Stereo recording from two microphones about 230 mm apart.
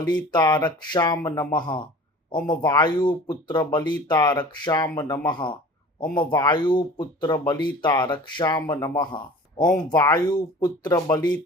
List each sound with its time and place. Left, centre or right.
0.3 s speech: centre